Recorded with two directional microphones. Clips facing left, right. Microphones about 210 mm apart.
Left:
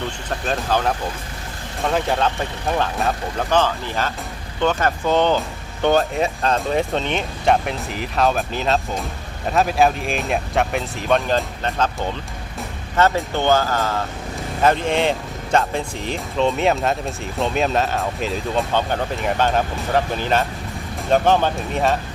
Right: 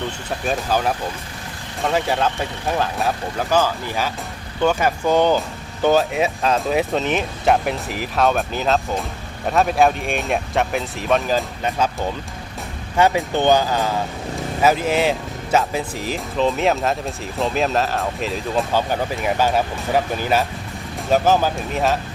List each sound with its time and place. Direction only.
0.4 s speech: 10° right (ahead or behind)